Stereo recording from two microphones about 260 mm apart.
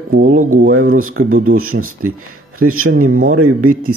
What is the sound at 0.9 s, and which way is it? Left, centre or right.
Speech, right.